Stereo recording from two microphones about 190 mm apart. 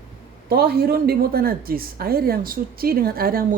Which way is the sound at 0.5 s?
55° right (ahead or behind).